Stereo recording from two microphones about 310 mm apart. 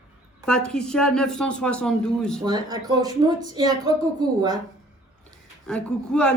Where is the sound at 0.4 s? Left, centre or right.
Centre.